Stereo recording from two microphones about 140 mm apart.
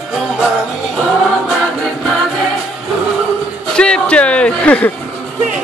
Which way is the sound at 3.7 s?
5° left (ahead or behind).